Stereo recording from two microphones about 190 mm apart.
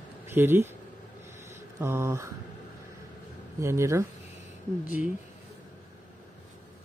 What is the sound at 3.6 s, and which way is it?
Speech, 15° right (ahead or behind).